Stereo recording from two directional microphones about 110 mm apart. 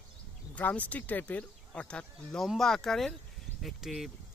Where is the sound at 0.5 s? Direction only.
15° left (ahead or behind).